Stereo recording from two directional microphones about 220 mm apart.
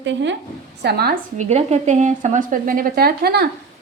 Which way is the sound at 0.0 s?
55° right (ahead or behind).